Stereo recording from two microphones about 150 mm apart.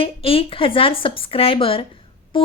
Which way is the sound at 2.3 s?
35° left (ahead or behind).